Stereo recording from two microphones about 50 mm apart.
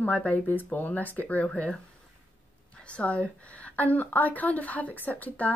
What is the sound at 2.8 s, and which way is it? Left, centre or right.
Speech, left.